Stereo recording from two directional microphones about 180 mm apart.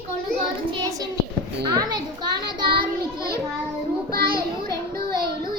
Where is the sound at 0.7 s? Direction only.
20° right (ahead or behind).